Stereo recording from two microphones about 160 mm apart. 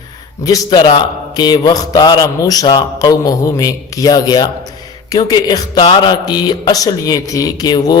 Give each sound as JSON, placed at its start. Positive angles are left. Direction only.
{"t": 0.4, "sound": "a man's voice", "side_deg": 25}